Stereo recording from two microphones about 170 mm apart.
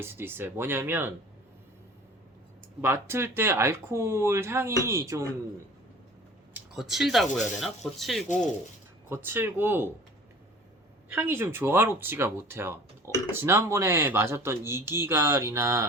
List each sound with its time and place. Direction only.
0.0 s speech: 15° right (ahead or behind)
2.8 s speech: 15° right (ahead or behind)
6.5 s speech: centre (ahead or behind)
9.0 s speech: 15° right (ahead or behind)
11.1 s speech: 15° right (ahead or behind)